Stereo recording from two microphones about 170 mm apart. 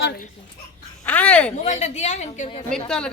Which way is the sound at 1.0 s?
10° left (ahead or behind).